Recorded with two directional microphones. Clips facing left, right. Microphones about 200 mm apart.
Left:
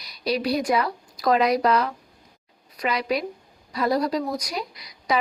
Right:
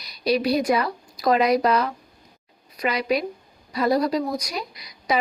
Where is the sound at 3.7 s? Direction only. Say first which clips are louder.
Right 2 dB; 15° right (ahead or behind).